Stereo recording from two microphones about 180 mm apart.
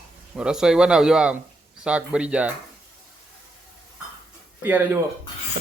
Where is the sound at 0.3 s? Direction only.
5° right (ahead or behind).